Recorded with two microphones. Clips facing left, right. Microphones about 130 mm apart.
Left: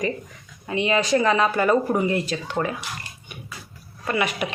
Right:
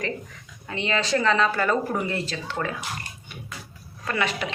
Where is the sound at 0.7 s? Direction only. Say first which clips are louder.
Left 4 dB; 15° left (ahead or behind).